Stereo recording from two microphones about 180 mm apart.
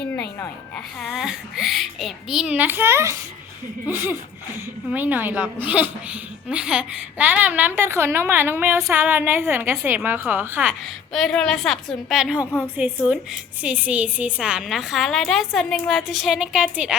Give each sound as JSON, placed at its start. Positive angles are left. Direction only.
{"t": 0.1, "sound": "a sound", "side_deg": 10}
{"t": 1.0, "sound": "a woman's voice", "side_deg": 0}
{"t": 11.1, "sound": "a woman's voice", "side_deg": 5}